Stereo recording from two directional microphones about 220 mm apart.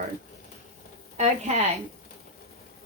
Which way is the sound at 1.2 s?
30° right (ahead or behind).